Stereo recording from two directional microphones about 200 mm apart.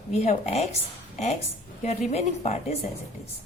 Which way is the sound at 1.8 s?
35° left (ahead or behind).